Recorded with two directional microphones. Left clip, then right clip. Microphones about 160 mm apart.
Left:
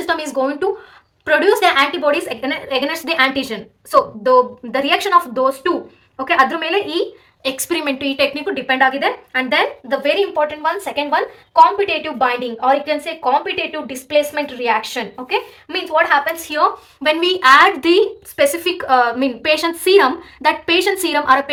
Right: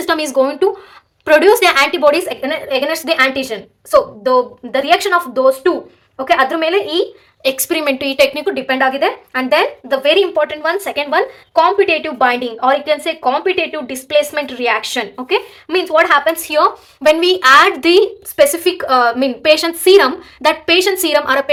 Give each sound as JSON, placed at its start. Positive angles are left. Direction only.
{"t": 0.0, "sound": "a woman's voice", "side_deg": -35}
{"t": 2.4, "sound": "a woman's voice", "side_deg": -15}
{"t": 10.2, "sound": "a woman's voice", "side_deg": -40}